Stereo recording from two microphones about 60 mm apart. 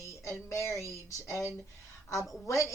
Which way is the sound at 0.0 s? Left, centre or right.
Left.